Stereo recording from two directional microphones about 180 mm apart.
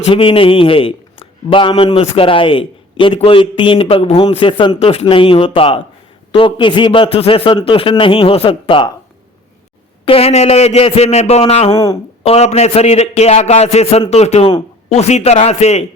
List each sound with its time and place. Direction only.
0.0 s a man's voice: 30° left (ahead or behind)
10.1 s a man's voice: 35° left (ahead or behind)
11.7 s a man's voice: 20° left (ahead or behind)
12.2 s a man's voice: 35° left (ahead or behind)